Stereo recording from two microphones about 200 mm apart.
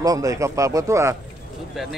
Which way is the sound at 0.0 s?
15° right (ahead or behind).